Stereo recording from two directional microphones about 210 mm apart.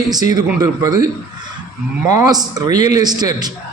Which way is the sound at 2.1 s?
15° right (ahead or behind).